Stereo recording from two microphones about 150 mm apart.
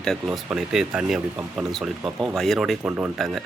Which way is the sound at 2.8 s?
15° right (ahead or behind).